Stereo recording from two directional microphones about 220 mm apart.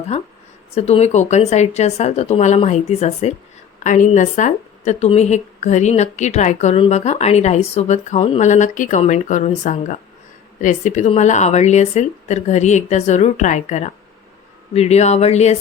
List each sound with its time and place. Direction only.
0.7 s a woman's voice: 30° left (ahead or behind)